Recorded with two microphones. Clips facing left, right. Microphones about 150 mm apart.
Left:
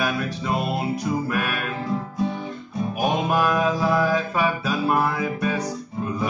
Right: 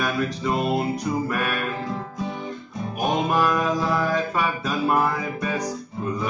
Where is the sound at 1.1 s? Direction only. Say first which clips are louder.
Left 2 dB; 5° left (ahead or behind).